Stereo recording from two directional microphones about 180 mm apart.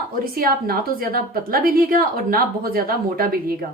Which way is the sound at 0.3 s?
55° right (ahead or behind).